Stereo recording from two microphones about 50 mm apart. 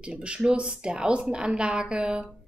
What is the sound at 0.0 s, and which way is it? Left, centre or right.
A woman's voice, right.